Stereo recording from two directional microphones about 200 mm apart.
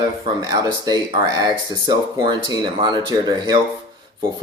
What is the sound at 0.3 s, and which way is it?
Speech, 20° right (ahead or behind).